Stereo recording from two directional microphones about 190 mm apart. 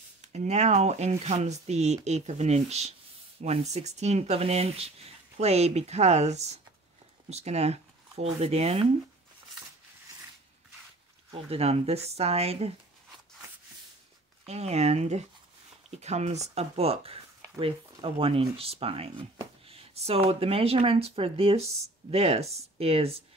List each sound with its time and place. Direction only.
0.2 s speech: 35° right (ahead or behind)
11.5 s speech: 30° right (ahead or behind)
14.4 s speech: 35° right (ahead or behind)